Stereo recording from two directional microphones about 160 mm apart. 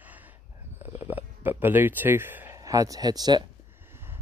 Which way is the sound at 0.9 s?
10° right (ahead or behind).